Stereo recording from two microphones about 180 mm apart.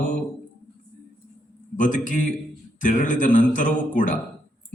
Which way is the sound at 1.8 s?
45° left (ahead or behind).